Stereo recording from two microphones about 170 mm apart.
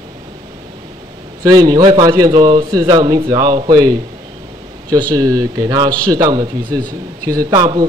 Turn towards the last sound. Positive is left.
turn(degrees=-20)  # may be behind; listen again after turning